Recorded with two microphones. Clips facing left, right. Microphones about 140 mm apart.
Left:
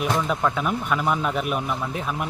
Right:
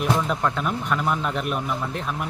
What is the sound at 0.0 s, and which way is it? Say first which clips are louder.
Speech: even; centre (ahead or behind).